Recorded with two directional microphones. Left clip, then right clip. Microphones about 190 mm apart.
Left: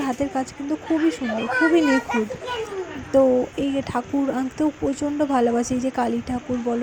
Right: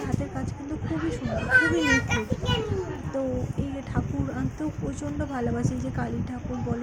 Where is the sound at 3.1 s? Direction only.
35° left (ahead or behind).